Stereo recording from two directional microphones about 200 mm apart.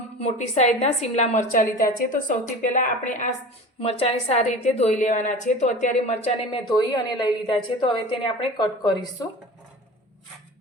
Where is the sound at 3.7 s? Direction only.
30° left (ahead or behind).